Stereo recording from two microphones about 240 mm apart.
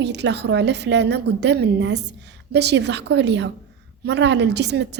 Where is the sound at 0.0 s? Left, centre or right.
Right.